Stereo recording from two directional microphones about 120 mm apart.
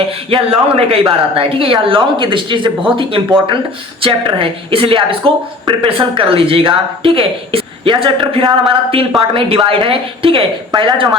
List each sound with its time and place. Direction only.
0.3 s speech: 50° right (ahead or behind)